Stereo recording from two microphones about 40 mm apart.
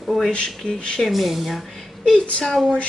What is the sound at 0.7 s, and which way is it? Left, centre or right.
Speech, centre.